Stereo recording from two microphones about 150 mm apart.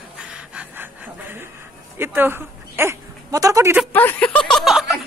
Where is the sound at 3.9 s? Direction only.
10° left (ahead or behind).